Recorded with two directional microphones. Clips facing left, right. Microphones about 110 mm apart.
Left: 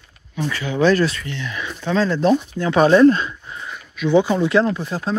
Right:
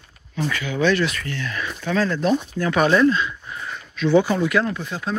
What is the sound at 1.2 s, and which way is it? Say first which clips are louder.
Speech: even; 20° left (ahead or behind).